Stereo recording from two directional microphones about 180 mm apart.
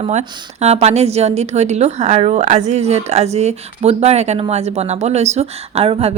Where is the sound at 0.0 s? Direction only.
40° right (ahead or behind).